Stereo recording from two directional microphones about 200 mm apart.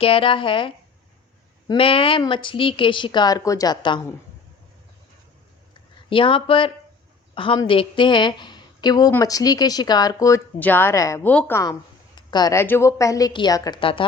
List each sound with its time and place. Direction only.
0.0 s a woman's voice: 25° left (ahead or behind)
6.1 s a woman's voice: 25° left (ahead or behind)